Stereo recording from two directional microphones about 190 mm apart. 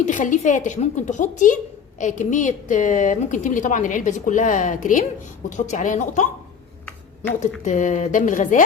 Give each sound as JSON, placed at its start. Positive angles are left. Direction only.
{"t": 0.0, "sound": "a woman's voice", "side_deg": 40}
{"t": 7.6, "sound": "a woman's voice", "side_deg": 40}